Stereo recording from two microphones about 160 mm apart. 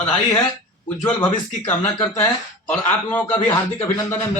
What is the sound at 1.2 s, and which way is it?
Speech, 25° left (ahead or behind).